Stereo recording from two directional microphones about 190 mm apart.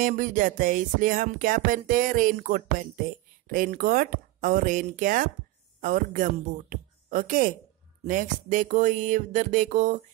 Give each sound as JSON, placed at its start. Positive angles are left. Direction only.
{"t": 0.0, "sound": "music", "side_deg": -45}
{"t": 5.8, "sound": "speech", "side_deg": -45}
{"t": 8.1, "sound": "music", "side_deg": -45}